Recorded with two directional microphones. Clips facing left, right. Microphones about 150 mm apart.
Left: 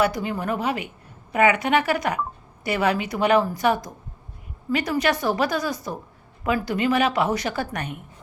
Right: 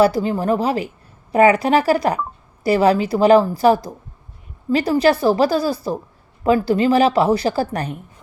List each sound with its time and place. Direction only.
0.0 s a woman's voice: 30° right (ahead or behind)